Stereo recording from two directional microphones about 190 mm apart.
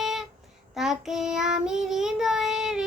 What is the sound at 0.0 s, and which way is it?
Child singing, centre (ahead or behind).